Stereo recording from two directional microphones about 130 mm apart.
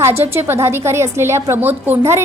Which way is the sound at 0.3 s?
20° right (ahead or behind).